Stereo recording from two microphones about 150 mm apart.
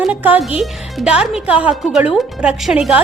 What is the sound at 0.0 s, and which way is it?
Speech, 10° right (ahead or behind).